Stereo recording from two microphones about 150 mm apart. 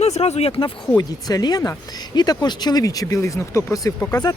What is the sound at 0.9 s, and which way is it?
Speech, 25° left (ahead or behind).